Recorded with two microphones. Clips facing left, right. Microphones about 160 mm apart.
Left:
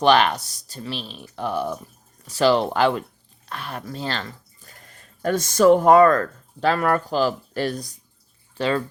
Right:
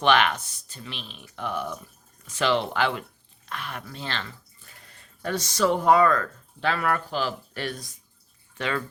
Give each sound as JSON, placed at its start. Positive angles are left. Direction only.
{"t": 0.0, "sound": "speech", "side_deg": 35}